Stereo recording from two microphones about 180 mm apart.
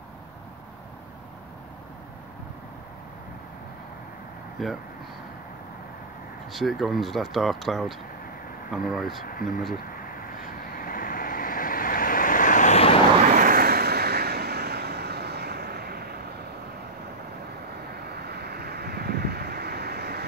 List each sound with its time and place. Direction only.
4.6 s speech: centre (ahead or behind)
6.5 s speech: centre (ahead or behind)
9.3 s a sound: 50° left (ahead or behind)
10.8 s vehicle: 50° left (ahead or behind); by 13.0 s 35° left (ahead or behind)
13.3 s vehicle: 50° right (ahead or behind)
18.0 s waves: 60° right (ahead or behind)